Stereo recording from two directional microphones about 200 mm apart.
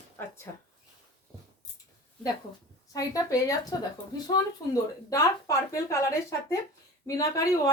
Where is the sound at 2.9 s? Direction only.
15° left (ahead or behind).